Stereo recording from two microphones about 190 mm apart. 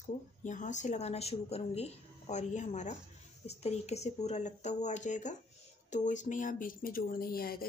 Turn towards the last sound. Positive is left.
turn(degrees=50)  # may be behind; listen again after turning